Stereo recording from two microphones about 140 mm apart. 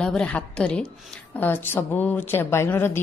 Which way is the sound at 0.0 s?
10° left (ahead or behind).